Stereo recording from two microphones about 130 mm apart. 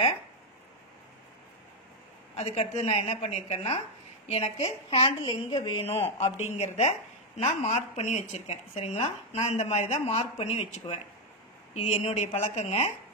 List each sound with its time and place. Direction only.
2.3 s a woman's voice: 55° left (ahead or behind)
6.1 s a woman's voice: 60° left (ahead or behind)